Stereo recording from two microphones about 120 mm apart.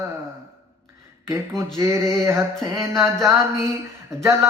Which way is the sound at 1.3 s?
25° right (ahead or behind).